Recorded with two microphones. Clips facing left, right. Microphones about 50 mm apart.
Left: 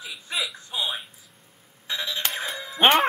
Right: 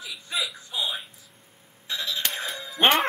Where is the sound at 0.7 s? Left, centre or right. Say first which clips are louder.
Left 1 dB; left.